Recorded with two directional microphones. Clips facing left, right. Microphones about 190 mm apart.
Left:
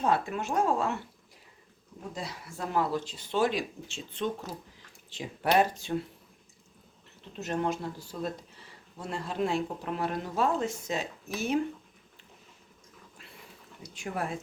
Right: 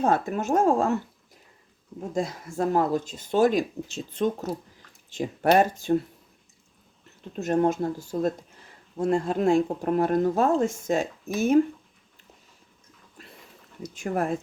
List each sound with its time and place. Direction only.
0.0 s speech: 45° right (ahead or behind)
2.1 s speech: 45° right (ahead or behind)
7.3 s speech: 50° right (ahead or behind)
13.8 s speech: 45° right (ahead or behind)